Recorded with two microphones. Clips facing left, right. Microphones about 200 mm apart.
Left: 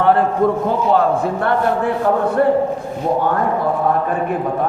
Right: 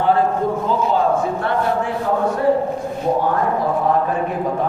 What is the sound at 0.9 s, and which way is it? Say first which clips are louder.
Speech: left 2 dB; 60° left (ahead or behind).